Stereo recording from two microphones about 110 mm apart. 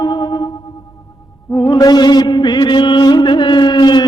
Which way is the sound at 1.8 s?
40° left (ahead or behind).